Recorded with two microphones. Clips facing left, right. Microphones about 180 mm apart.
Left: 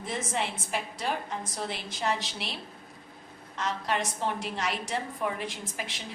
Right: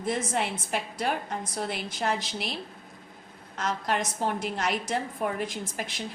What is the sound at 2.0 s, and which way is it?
Speech, 50° right (ahead or behind).